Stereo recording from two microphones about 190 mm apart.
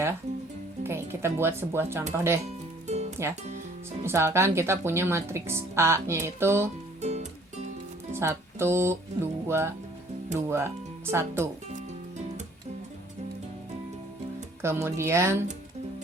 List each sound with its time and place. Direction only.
0.9 s speech: 15° right (ahead or behind)
2.8 s music: 35° right (ahead or behind)
4.0 s speech: 15° right (ahead or behind)
7.0 s music: 35° right (ahead or behind)
8.1 s speech: 15° right (ahead or behind)
14.6 s speech: 15° right (ahead or behind)